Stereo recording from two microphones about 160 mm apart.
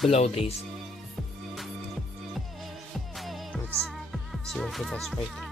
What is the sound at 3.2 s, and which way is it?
Music, centre (ahead or behind).